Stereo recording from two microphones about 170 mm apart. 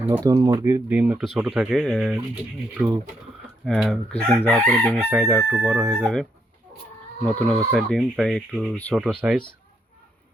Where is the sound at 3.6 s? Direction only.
Centre (ahead or behind).